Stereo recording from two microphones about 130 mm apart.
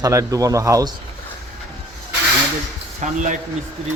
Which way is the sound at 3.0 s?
70° right (ahead or behind).